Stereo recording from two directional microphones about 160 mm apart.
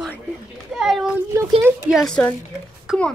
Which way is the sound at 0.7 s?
Centre (ahead or behind).